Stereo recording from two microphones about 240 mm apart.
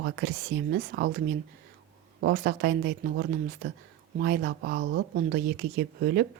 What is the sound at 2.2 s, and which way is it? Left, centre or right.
Speech, right.